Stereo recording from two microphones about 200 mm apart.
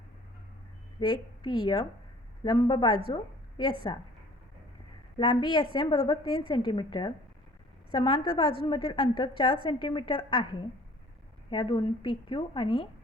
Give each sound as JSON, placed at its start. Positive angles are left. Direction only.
{"t": 0.9, "sound": "a woman's voice", "side_deg": 20}
{"t": 5.1, "sound": "a woman's voice", "side_deg": 25}